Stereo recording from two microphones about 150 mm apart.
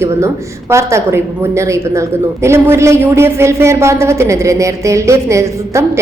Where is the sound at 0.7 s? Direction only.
20° right (ahead or behind).